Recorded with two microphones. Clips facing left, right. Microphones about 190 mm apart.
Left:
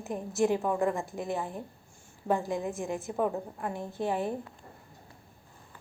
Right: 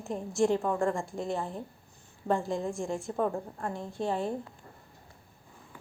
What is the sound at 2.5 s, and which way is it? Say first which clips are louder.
A woman's voice: even; 15° left (ahead or behind).